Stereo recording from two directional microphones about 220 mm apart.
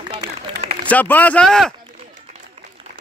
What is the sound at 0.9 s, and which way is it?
Speech, 5° left (ahead or behind).